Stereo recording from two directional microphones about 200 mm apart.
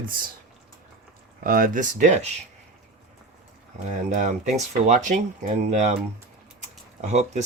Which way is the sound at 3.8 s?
35° right (ahead or behind).